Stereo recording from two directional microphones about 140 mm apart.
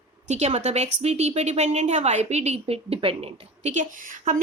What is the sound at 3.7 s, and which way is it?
Speech, 70° right (ahead or behind).